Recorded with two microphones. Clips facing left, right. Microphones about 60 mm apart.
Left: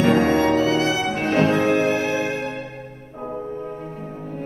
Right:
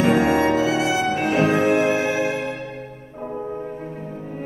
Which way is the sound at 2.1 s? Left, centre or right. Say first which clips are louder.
Right 1 dB; left.